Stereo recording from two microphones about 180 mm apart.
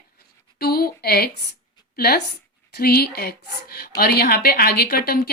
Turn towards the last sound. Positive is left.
turn(degrees=55)  # may be behind; listen again after turning